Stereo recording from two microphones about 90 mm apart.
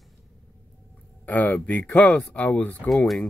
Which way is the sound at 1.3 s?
15° left (ahead or behind).